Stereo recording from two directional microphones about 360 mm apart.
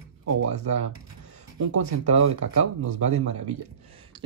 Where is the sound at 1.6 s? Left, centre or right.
Right.